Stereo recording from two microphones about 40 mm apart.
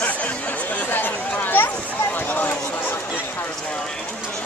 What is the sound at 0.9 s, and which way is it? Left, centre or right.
Speech, left.